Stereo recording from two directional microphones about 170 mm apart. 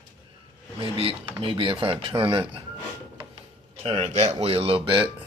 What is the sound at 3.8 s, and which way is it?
Speech, 35° right (ahead or behind).